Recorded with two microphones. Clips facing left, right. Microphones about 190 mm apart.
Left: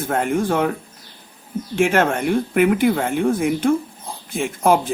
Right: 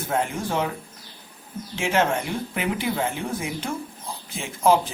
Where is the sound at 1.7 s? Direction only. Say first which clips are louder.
Left 5 dB; 55° left (ahead or behind).